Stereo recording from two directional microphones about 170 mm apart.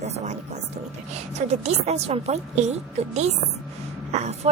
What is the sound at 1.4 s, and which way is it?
A woman's voice, 40° right (ahead or behind).